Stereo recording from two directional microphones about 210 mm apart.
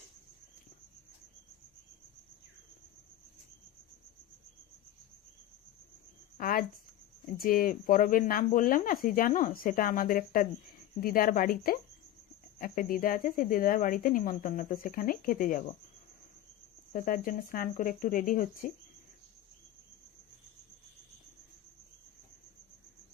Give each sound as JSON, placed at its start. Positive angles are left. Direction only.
{"t": 6.3, "sound": "a sound", "side_deg": 45}
{"t": 7.3, "sound": "speech", "side_deg": 40}
{"t": 16.9, "sound": "speech", "side_deg": 40}